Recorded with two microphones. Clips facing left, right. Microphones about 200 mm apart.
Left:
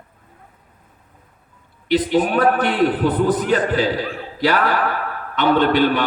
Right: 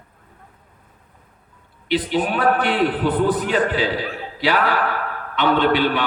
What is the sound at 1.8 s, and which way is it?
A man's voice, 40° left (ahead or behind).